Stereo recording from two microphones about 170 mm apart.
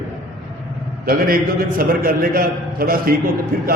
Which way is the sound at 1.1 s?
60° right (ahead or behind).